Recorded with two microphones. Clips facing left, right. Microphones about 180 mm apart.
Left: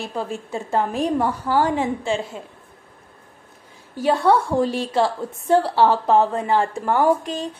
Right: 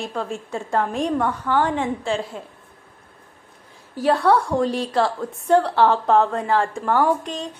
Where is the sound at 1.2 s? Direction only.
35° left (ahead or behind).